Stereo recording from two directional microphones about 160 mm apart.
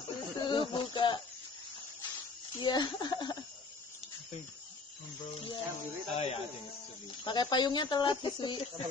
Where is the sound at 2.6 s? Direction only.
30° left (ahead or behind).